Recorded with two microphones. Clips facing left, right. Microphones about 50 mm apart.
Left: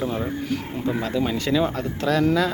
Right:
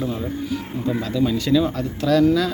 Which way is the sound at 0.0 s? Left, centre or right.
Left.